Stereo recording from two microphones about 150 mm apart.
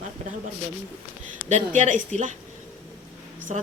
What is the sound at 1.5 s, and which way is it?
Speech, 50° right (ahead or behind).